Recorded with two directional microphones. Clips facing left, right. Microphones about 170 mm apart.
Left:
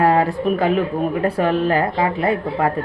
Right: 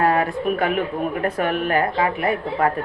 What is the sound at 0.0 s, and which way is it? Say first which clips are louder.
Speech: left 3 dB; 30° left (ahead or behind).